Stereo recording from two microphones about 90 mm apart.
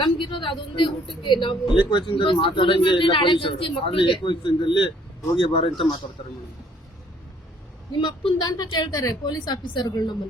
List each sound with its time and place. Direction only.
0.0 s a woman's voice: 70° left (ahead or behind)
5.4 s speech: 80° left
7.9 s a man's voice: 60° left (ahead or behind)
8.4 s a woman's voice: 50° left (ahead or behind)